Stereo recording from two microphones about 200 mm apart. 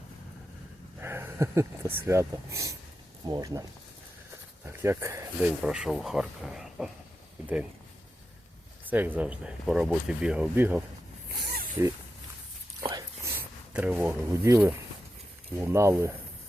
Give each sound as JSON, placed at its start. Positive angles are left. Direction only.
{"t": 1.0, "sound": "speech", "side_deg": -10}
{"t": 8.9, "sound": "speech", "side_deg": -10}
{"t": 13.7, "sound": "speech", "side_deg": -10}